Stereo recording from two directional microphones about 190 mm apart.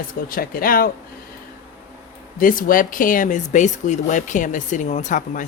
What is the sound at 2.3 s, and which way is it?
Speech, 45° left (ahead or behind).